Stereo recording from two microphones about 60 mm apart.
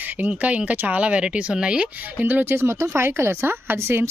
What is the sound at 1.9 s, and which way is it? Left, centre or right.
Speech, right.